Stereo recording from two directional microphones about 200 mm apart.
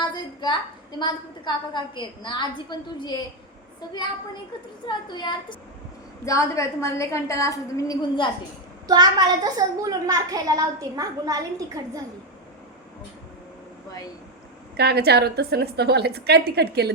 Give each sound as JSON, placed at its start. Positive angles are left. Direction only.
{"t": 0.0, "sound": "a sound", "side_deg": 20}
{"t": 0.9, "sound": "a woman's voice", "side_deg": 20}
{"t": 8.9, "sound": "a woman's voice", "side_deg": -20}
{"t": 14.8, "sound": "a woman's voice", "side_deg": -55}